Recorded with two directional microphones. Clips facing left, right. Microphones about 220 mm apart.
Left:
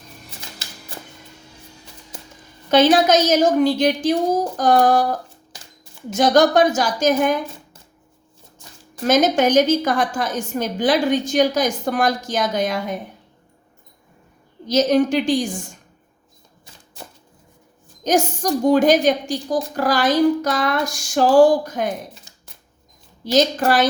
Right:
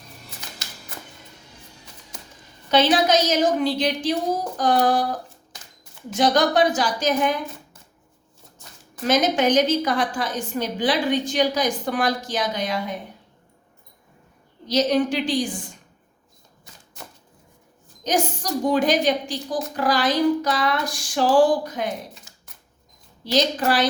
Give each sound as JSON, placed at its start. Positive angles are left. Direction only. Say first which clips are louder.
{"t": 2.6, "sound": "a woman's voice", "louder": "left 4 dB", "side_deg": 45}
{"t": 6.1, "sound": "a woman's voice", "louder": "left 4 dB", "side_deg": 45}
{"t": 9.0, "sound": "a woman's voice", "louder": "left 3 dB", "side_deg": 45}
{"t": 14.7, "sound": "a woman's voice", "louder": "left 4 dB", "side_deg": 45}
{"t": 18.0, "sound": "a woman's voice", "louder": "left 5 dB", "side_deg": 45}
{"t": 23.2, "sound": "a woman's voice", "louder": "left 4 dB", "side_deg": 45}